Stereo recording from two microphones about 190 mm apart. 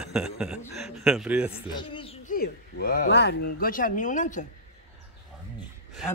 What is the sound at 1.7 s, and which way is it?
Speech, 25° left (ahead or behind).